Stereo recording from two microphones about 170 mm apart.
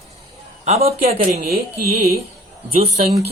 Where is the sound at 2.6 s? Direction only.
35° right (ahead or behind).